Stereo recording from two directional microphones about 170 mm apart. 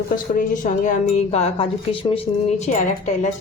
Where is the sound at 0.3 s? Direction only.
50° left (ahead or behind).